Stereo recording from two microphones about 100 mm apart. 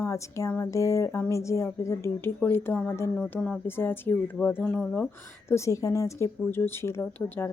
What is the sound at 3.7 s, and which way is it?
A woman's voice, 20° left (ahead or behind).